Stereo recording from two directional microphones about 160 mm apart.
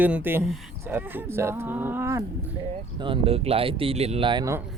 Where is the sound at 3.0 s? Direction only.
35° right (ahead or behind).